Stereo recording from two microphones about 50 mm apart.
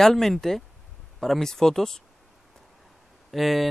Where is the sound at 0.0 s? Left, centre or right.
Centre.